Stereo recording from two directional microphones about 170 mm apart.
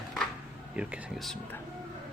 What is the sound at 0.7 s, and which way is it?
Speech, 5° right (ahead or behind).